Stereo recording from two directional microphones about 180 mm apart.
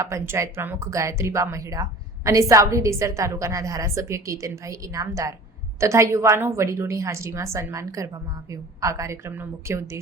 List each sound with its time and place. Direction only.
0.0 s speech: 15° right (ahead or behind)